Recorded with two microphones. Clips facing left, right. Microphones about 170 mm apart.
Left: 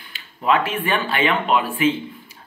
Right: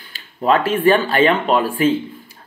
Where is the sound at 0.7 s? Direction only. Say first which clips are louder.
Right 8 dB; 35° right (ahead or behind).